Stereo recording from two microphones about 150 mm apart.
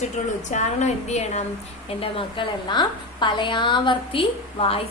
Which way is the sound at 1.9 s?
40° left (ahead or behind).